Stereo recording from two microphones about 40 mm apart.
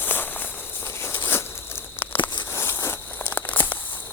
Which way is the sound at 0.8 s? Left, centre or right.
Left.